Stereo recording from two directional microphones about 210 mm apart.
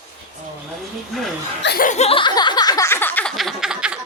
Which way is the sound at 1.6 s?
45° left (ahead or behind).